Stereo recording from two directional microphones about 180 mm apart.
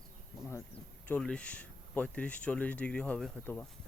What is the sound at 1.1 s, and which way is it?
Speech, 5° left (ahead or behind).